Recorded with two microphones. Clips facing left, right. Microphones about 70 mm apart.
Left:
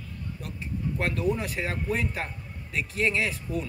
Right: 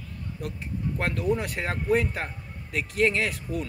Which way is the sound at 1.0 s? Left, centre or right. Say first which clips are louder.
Right 1 dB; right.